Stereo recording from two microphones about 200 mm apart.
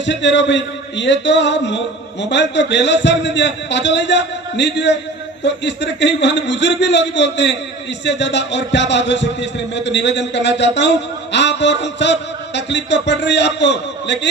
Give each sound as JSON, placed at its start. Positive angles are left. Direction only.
{"t": 0.0, "sound": "a man's voice", "side_deg": 60}